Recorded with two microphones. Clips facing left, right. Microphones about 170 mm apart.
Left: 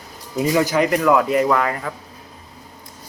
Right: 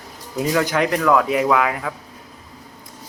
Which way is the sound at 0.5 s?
5° left (ahead or behind).